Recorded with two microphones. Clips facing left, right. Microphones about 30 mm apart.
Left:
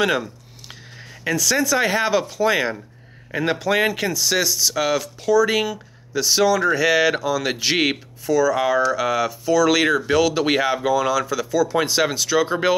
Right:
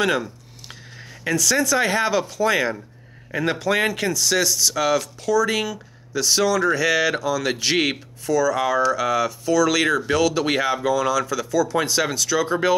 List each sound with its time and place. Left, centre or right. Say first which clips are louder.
0.0 s speech: left 1 dB; centre